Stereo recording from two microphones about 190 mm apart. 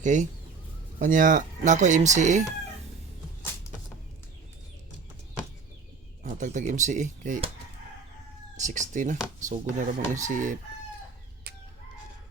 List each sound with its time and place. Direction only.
0.0 s speech: 40° right (ahead or behind)
6.2 s speech: 40° right (ahead or behind)
8.5 s speech: 40° right (ahead or behind)